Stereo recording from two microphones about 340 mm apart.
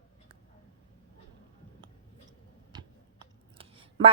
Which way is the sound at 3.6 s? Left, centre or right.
Centre.